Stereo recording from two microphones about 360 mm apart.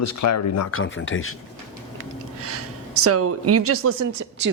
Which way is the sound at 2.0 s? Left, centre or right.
Right.